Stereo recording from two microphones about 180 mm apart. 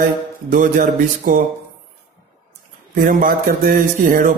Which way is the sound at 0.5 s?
50° right (ahead or behind).